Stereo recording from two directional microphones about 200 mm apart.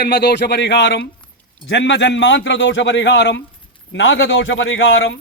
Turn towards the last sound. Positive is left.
turn(degrees=65)  # may be behind; listen again after turning